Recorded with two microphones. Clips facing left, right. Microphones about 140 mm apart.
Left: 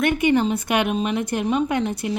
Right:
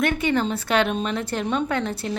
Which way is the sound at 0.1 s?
15° left (ahead or behind).